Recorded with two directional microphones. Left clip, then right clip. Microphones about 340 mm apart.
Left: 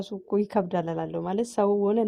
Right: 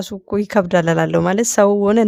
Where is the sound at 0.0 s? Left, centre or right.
Right.